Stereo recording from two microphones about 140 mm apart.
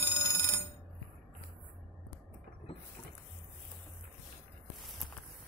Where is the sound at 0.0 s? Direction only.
25° left (ahead or behind).